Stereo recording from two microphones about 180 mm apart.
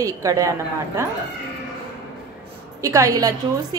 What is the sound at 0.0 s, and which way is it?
Speech, 20° right (ahead or behind).